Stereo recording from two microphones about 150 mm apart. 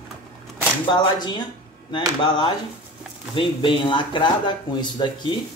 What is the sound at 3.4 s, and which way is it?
Speech, 35° left (ahead or behind).